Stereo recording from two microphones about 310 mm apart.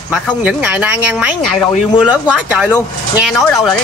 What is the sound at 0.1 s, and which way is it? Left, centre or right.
Speech, centre.